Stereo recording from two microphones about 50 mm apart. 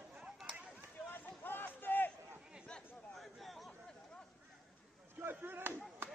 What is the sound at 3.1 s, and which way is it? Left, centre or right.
Chatter, centre.